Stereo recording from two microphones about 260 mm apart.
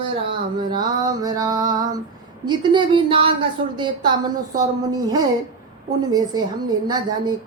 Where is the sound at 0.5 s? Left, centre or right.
Centre.